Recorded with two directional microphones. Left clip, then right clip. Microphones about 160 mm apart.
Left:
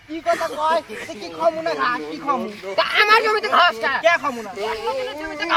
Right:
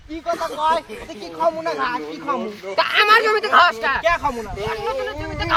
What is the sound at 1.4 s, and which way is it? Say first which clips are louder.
Speech: left 1 dB; 40° right (ahead or behind).